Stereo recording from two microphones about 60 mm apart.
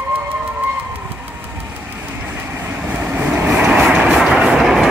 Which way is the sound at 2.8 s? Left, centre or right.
Right.